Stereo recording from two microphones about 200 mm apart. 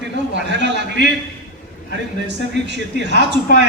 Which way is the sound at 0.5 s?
60° right (ahead or behind).